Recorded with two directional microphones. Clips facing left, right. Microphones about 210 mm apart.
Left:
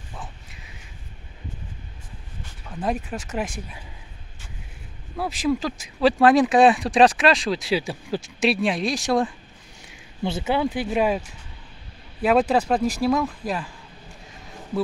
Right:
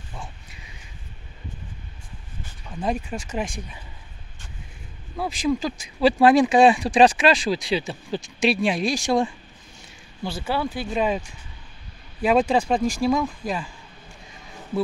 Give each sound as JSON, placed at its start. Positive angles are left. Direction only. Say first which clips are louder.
{"t": 0.1, "sound": "a sound", "louder": "even", "side_deg": 0}
{"t": 2.7, "sound": "speech", "louder": "even", "side_deg": 5}
{"t": 5.1, "sound": "speech", "louder": "even", "side_deg": 0}
{"t": 10.2, "sound": "speech", "louder": "left 3 dB", "side_deg": 20}